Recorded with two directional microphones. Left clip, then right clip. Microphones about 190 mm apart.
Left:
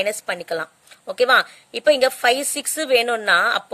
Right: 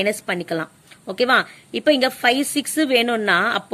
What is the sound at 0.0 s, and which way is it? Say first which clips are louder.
A woman's voice: right 1 dB; 25° left (ahead or behind).